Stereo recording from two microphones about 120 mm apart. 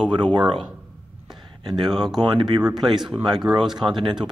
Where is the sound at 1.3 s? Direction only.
40° right (ahead or behind).